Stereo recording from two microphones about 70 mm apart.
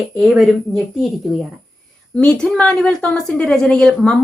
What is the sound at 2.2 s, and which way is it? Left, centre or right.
A woman's voice, centre.